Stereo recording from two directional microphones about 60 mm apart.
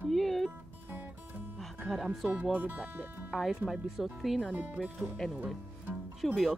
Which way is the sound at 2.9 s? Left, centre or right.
Right.